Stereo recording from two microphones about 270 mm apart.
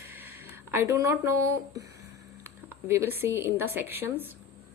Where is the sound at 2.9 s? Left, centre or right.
Centre.